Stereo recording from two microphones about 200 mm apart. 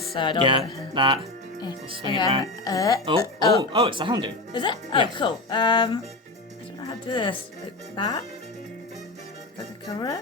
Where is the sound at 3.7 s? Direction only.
25° right (ahead or behind).